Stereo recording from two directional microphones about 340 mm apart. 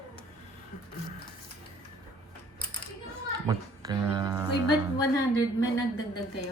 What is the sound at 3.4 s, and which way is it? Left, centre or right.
Speech, centre.